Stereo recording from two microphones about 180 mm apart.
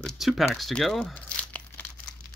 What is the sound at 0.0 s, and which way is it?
Speech, centre (ahead or behind).